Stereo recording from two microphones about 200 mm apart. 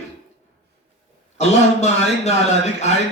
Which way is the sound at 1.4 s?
35° left (ahead or behind).